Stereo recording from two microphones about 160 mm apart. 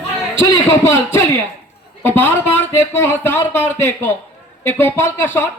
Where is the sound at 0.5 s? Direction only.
15° left (ahead or behind).